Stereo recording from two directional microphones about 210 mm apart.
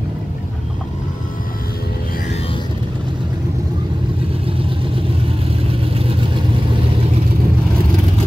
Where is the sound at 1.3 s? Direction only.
40° left (ahead or behind); by 2.7 s 25° left (ahead or behind).